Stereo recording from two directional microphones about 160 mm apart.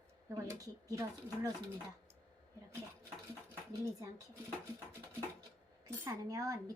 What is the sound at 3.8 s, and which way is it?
Speech, 20° right (ahead or behind).